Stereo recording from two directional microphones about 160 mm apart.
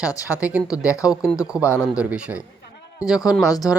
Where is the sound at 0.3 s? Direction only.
10° right (ahead or behind).